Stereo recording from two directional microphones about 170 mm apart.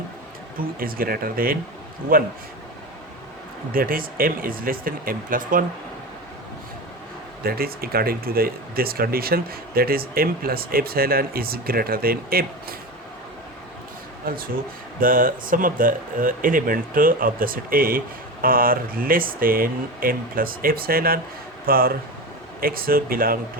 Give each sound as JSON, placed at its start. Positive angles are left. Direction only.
{"t": 0.8, "sound": "speech", "side_deg": -60}
{"t": 3.7, "sound": "speech", "side_deg": -55}
{"t": 7.4, "sound": "speech", "side_deg": -60}
{"t": 14.3, "sound": "speech", "side_deg": -60}